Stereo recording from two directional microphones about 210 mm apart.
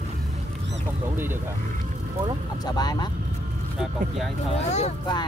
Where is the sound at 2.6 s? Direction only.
20° left (ahead or behind).